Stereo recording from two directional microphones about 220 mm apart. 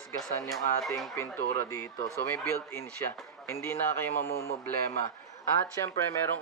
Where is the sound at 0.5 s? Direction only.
Centre (ahead or behind).